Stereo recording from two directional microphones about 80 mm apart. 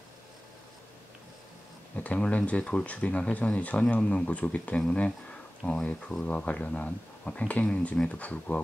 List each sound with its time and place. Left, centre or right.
2.0 s speech: centre